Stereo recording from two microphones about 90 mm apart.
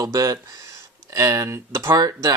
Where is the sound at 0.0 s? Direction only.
40° right (ahead or behind).